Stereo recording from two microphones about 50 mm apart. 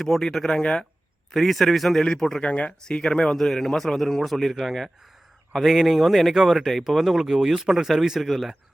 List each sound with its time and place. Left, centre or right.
0.0 s speech: centre
1.3 s speech: centre
2.5 s speech: left
3.3 s speech: centre